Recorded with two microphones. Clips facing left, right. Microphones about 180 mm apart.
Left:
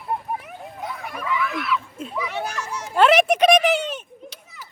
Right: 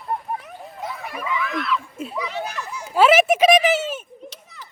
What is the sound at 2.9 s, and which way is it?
Children playing, 5° right (ahead or behind).